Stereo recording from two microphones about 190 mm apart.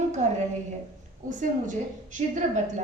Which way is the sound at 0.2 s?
40° right (ahead or behind).